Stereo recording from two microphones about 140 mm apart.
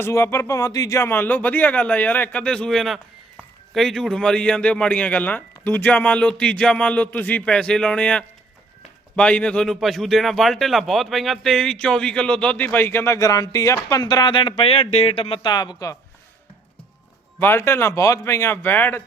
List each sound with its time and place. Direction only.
0.0 s speech: 20° left (ahead or behind); by 15.4 s 45° left (ahead or behind)
15.4 s speech: 30° left (ahead or behind)
17.4 s speech: 15° left (ahead or behind)